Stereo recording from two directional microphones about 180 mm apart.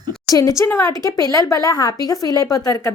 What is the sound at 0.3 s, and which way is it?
A woman's voice, 20° left (ahead or behind).